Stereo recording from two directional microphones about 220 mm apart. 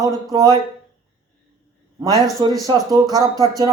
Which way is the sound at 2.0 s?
15° right (ahead or behind).